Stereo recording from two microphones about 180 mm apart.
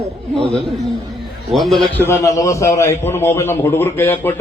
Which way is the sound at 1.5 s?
Centre (ahead or behind).